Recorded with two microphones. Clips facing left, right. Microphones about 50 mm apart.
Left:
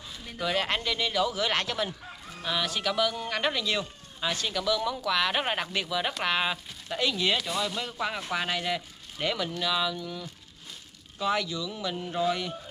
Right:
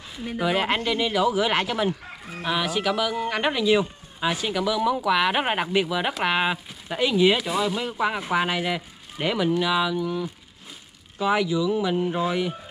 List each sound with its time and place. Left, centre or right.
0.4 s speech: centre